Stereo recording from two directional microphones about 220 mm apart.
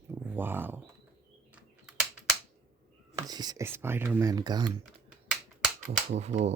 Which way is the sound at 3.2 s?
20° right (ahead or behind).